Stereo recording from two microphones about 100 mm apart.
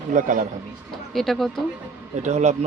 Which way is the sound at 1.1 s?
Centre (ahead or behind).